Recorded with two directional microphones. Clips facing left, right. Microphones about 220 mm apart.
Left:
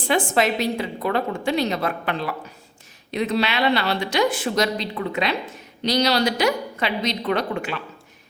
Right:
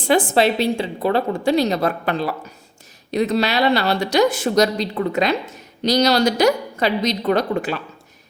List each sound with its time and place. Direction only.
0.1 s speech: 35° right (ahead or behind)